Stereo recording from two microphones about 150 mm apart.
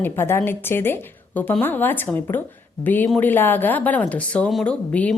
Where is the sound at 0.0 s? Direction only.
15° left (ahead or behind).